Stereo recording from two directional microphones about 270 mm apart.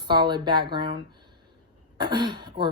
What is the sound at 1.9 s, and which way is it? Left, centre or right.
Throat clearing, centre.